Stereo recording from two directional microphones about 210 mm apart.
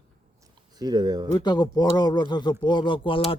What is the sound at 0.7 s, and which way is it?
Speech, 20° right (ahead or behind).